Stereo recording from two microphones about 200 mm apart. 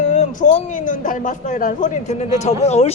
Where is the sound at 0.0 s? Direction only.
35° left (ahead or behind).